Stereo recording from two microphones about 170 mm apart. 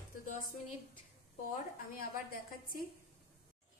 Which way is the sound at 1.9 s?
60° left (ahead or behind).